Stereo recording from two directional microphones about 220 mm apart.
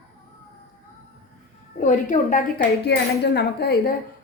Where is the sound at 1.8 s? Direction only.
35° left (ahead or behind).